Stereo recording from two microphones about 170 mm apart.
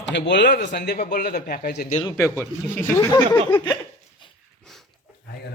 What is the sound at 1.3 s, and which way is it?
Speech, 65° left (ahead or behind).